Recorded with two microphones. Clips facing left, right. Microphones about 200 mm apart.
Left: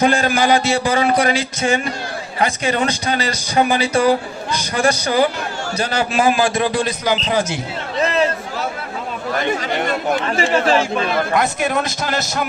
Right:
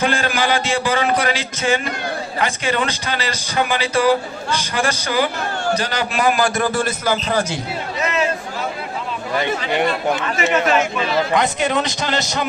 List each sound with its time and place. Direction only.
0.0 s a man's voice: 35° left (ahead or behind)
6.6 s a man's voice: 15° left (ahead or behind)
7.9 s a sound: 35° left (ahead or behind)
10.5 s a man's voice: 30° left (ahead or behind)
11.3 s a man's voice: centre (ahead or behind)